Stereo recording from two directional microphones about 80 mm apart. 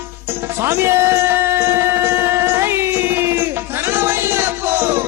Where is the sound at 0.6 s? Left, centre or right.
Right.